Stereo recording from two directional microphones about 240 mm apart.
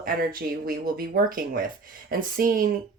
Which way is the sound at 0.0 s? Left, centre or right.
Right.